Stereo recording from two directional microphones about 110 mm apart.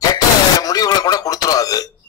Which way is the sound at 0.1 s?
35° left (ahead or behind).